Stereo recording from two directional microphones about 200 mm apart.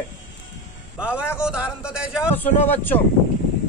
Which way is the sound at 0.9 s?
5° right (ahead or behind).